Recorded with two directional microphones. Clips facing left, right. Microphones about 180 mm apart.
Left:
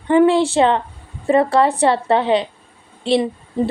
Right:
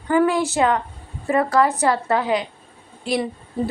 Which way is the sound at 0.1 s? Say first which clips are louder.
Left 5 dB; 25° left (ahead or behind).